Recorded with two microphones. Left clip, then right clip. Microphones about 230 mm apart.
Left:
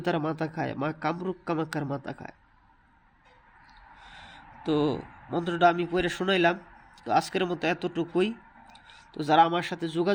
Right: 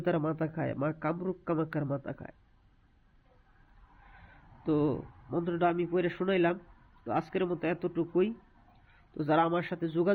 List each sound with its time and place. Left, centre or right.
0.0 s a man's voice: centre
4.6 s a man's voice: centre